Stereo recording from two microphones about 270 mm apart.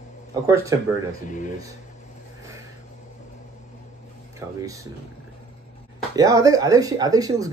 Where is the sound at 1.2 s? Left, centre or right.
Left.